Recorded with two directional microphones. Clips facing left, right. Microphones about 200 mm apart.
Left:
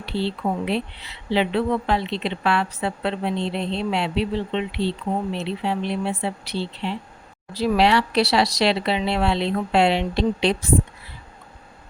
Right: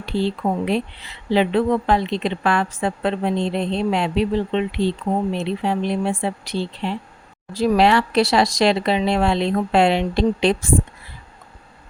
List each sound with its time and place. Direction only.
0.0 s speech: 45° right (ahead or behind)